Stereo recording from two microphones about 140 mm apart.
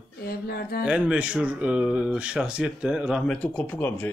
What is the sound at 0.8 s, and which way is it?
Speech, 5° right (ahead or behind).